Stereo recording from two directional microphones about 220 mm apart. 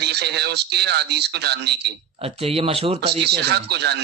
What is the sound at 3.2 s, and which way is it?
Speech, 50° right (ahead or behind).